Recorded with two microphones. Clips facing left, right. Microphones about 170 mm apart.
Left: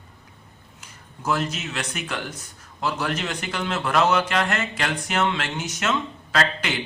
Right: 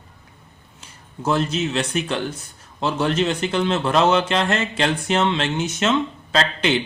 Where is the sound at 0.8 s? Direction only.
30° right (ahead or behind).